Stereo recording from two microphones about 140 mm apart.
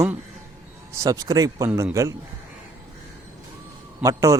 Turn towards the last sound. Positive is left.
turn(degrees=-20)  # may be behind; listen again after turning